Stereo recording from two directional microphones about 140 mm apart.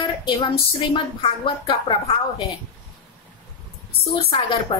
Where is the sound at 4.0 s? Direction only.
45° left (ahead or behind).